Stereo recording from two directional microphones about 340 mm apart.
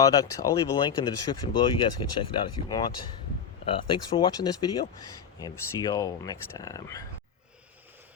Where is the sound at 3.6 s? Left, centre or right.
Centre.